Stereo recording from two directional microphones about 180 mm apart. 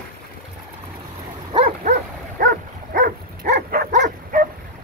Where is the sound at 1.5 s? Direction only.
25° right (ahead or behind).